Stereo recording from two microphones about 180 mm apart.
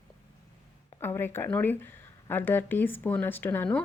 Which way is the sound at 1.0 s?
10° left (ahead or behind).